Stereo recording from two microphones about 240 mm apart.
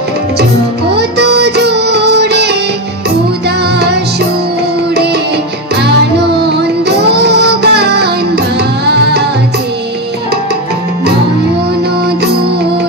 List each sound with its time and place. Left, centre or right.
0.9 s music: right
6.1 s music: right